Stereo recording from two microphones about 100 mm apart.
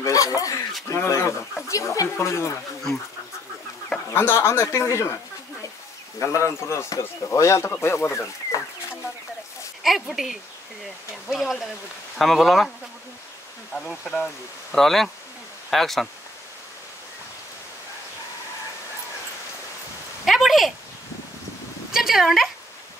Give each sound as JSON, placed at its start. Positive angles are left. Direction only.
{"t": 0.0, "sound": "speech", "side_deg": 35}
{"t": 4.1, "sound": "speech", "side_deg": 25}
{"t": 9.8, "sound": "speech", "side_deg": 0}
{"t": 13.7, "sound": "speech", "side_deg": 5}
{"t": 20.2, "sound": "a sound", "side_deg": 0}
{"t": 21.9, "sound": "speech", "side_deg": -5}